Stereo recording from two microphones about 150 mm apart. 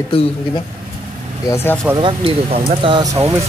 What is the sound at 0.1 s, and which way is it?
Speech, 40° left (ahead or behind).